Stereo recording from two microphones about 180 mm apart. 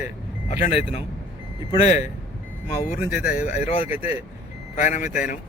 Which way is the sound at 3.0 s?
10° right (ahead or behind).